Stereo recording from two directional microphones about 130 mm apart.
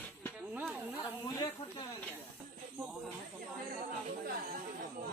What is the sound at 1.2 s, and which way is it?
Speech, 25° left (ahead or behind).